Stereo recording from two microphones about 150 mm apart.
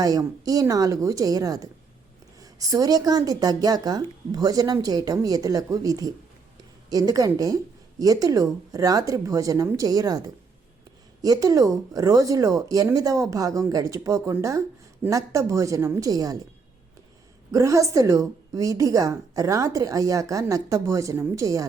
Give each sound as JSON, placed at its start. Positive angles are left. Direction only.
{"t": 0.0, "sound": "a woman's voice", "side_deg": -25}
{"t": 17.5, "sound": "a woman's voice", "side_deg": -20}